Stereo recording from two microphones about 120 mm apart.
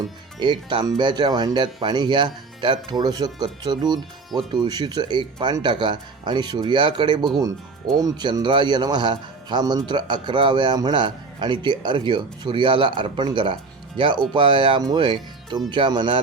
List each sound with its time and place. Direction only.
0.3 s speech: 40° right (ahead or behind)